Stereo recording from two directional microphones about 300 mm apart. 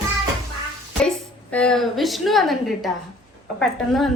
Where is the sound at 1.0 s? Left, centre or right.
Centre.